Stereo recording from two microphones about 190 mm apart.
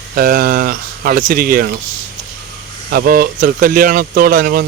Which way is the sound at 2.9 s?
50° right (ahead or behind).